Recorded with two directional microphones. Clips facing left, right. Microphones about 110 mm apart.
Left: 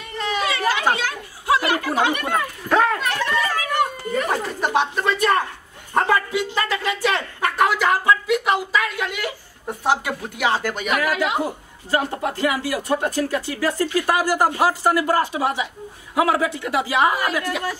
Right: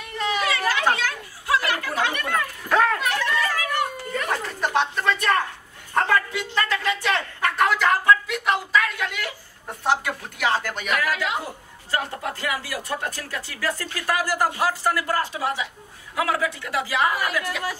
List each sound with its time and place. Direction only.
0.0 s chatter: 5° right (ahead or behind)
0.4 s chatter: 20° left (ahead or behind)
0.9 s children playing: 20° left (ahead or behind)
2.7 s speech: 5° left (ahead or behind)
3.3 s a sound: 20° left (ahead or behind)
5.9 s speech: 10° left (ahead or behind)
10.9 s speech: 15° left (ahead or behind)